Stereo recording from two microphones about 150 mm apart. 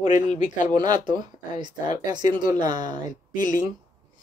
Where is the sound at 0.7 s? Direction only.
25° right (ahead or behind).